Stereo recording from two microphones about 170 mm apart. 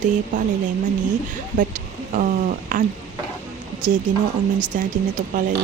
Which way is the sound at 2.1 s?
55° right (ahead or behind).